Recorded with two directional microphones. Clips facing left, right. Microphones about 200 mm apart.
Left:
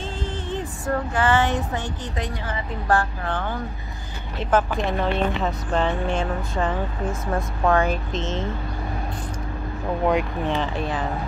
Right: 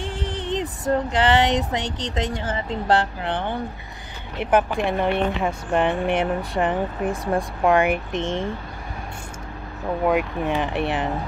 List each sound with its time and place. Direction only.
0.0 s music: 15° right (ahead or behind)
0.9 s speech: 20° right (ahead or behind)
10.0 s speech: 5° right (ahead or behind)